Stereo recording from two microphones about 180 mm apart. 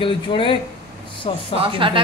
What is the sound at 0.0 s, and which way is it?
Speech, 30° left (ahead or behind).